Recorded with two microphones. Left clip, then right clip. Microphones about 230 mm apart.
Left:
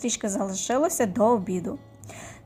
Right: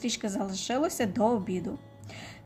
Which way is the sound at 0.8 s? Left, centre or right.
Centre.